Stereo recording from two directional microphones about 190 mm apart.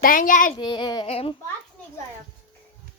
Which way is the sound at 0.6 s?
25° left (ahead or behind).